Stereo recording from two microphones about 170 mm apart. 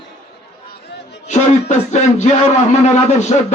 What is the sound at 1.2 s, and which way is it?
Speech, 45° left (ahead or behind).